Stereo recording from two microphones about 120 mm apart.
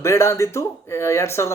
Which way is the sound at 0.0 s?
20° left (ahead or behind).